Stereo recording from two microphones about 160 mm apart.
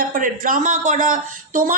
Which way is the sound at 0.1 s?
55° right (ahead or behind).